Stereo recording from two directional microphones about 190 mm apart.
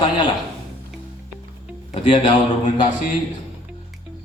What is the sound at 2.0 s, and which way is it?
Speech, 25° left (ahead or behind).